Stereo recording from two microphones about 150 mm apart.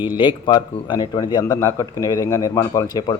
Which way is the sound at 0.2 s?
30° left (ahead or behind).